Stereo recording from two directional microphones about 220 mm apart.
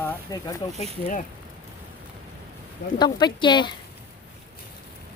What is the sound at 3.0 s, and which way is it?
Speech, 20° left (ahead or behind).